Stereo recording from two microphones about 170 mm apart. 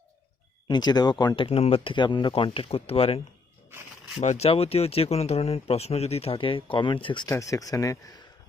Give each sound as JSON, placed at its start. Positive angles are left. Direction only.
{"t": 0.7, "sound": "speech", "side_deg": 25}
{"t": 4.2, "sound": "speech", "side_deg": 40}
{"t": 7.3, "sound": "speech", "side_deg": 20}